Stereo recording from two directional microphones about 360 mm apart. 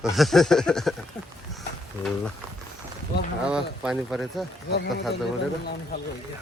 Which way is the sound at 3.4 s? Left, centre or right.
Centre.